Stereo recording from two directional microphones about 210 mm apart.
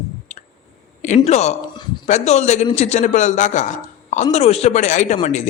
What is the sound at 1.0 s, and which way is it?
A woman's voice, 35° left (ahead or behind).